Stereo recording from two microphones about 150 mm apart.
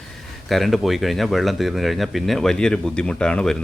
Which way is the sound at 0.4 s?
Centre (ahead or behind).